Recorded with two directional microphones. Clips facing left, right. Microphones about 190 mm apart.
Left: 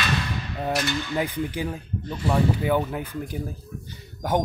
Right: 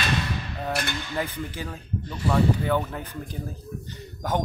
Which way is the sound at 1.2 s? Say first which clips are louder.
Left 2 dB; 15° left (ahead or behind).